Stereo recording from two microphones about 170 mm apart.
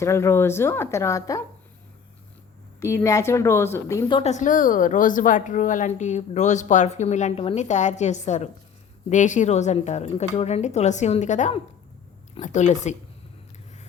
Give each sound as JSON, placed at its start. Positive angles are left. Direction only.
{"t": 0.0, "sound": "a woman's voice", "side_deg": 15}
{"t": 2.8, "sound": "a woman's voice", "side_deg": 20}
{"t": 4.1, "sound": "a woman's voice", "side_deg": 40}